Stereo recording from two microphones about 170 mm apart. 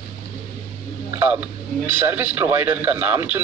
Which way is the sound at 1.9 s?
10° right (ahead or behind).